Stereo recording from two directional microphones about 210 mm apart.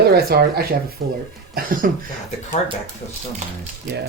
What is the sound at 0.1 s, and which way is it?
Speech, 50° right (ahead or behind).